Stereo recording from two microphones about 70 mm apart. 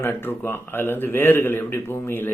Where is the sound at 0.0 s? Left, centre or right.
Left.